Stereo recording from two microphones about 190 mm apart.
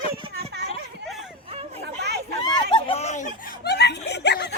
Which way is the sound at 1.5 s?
30° right (ahead or behind).